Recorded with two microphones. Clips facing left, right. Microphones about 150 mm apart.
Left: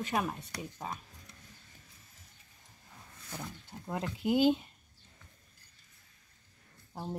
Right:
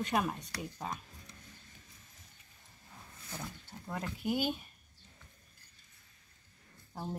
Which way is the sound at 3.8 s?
20° left (ahead or behind).